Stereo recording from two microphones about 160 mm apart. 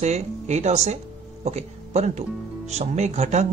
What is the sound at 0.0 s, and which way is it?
Speech, 45° right (ahead or behind).